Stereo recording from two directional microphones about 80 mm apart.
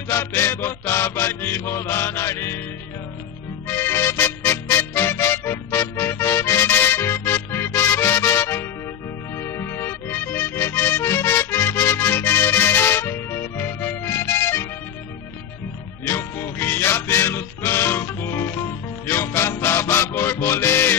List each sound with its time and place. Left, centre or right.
0.1 s mantra: left
3.6 s music: left
16.1 s music: left